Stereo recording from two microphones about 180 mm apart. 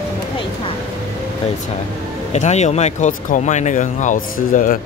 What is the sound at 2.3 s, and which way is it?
Speech, 40° left (ahead or behind).